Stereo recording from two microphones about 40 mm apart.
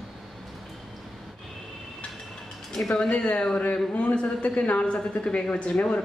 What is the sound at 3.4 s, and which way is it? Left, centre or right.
Speech, centre.